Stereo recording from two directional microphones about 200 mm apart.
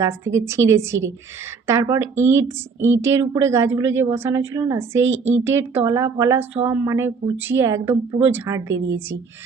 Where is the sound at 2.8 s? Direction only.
70° right (ahead or behind).